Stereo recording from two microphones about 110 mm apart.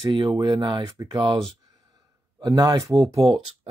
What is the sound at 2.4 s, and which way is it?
Speech, 40° right (ahead or behind).